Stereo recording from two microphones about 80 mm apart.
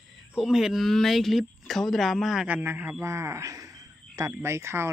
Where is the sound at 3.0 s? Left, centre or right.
Right.